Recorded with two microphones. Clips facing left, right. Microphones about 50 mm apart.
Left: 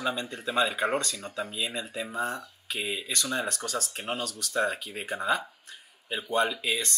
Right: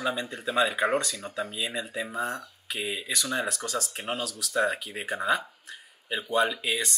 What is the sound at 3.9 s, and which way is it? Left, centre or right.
Speech, centre.